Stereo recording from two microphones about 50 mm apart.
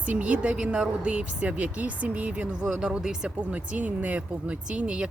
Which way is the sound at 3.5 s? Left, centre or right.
Right.